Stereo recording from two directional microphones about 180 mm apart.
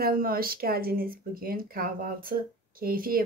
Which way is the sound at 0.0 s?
55° right (ahead or behind).